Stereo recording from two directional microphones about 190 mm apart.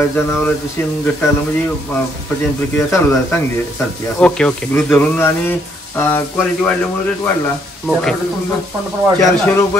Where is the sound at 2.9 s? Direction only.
10° left (ahead or behind).